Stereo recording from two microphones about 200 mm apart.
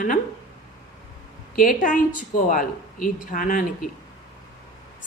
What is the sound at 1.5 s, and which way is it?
A woman's voice, 45° left (ahead or behind).